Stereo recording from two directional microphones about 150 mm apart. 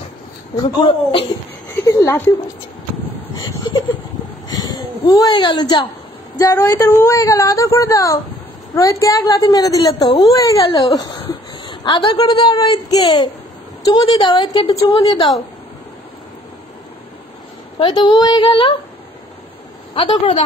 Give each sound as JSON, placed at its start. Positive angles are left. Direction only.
{"t": 0.6, "sound": "speech", "side_deg": 35}
{"t": 1.9, "sound": "speech", "side_deg": 20}
{"t": 3.3, "sound": "a sound", "side_deg": 30}
{"t": 6.3, "sound": "a woman's voice", "side_deg": 20}
{"t": 17.7, "sound": "speech", "side_deg": 30}
{"t": 20.0, "sound": "speech", "side_deg": 35}